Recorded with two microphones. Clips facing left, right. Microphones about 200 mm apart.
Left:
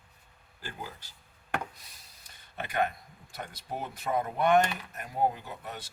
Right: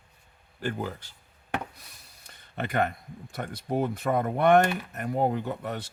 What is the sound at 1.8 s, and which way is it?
Speech, 60° right (ahead or behind).